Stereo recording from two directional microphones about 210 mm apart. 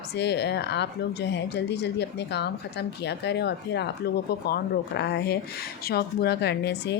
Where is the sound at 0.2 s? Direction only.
55° left (ahead or behind).